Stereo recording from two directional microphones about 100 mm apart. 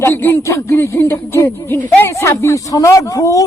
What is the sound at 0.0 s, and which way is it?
Speech, 20° left (ahead or behind).